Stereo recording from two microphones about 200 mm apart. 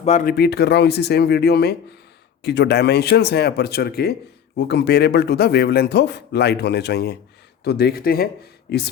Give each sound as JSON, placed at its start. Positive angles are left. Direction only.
{"t": 0.0, "sound": "speech", "side_deg": 40}